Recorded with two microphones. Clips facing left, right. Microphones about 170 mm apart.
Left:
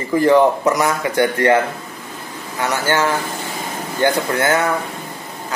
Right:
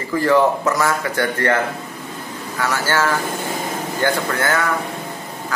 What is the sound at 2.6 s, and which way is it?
A man's voice, 20° left (ahead or behind).